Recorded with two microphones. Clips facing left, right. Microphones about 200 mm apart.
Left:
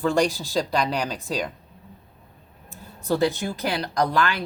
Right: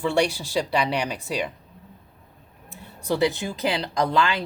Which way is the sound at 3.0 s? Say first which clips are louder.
Even; 15° right (ahead or behind).